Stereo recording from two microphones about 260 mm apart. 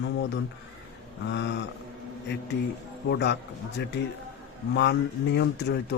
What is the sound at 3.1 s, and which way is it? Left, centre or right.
Speech, left.